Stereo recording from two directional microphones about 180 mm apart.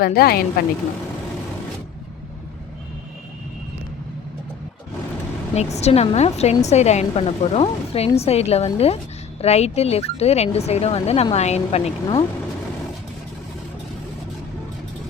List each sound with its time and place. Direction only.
0.0 s a woman's voice: 55° left (ahead or behind)
5.7 s a woman's voice: 35° left (ahead or behind)